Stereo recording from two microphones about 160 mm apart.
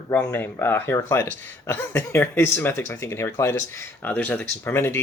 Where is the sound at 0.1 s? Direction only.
10° left (ahead or behind).